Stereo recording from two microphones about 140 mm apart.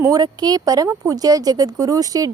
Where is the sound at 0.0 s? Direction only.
25° right (ahead or behind).